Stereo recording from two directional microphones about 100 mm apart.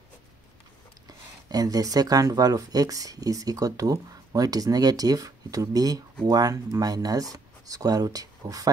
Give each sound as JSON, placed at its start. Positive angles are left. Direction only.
{"t": 1.0, "sound": "speech", "side_deg": -40}